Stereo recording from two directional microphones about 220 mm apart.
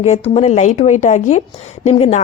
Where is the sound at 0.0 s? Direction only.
30° left (ahead or behind).